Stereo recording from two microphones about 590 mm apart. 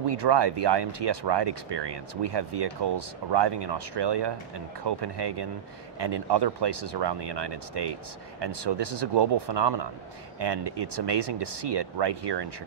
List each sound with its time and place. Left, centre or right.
0.0 s speech: right